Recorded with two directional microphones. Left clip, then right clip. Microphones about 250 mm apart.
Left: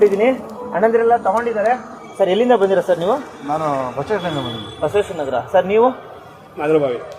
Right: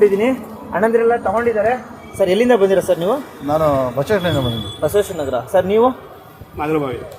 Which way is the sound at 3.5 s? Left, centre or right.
Right.